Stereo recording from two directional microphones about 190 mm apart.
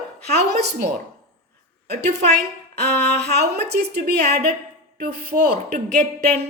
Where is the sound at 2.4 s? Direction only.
60° right (ahead or behind).